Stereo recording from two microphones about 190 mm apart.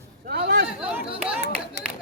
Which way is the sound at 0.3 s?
60° right (ahead or behind).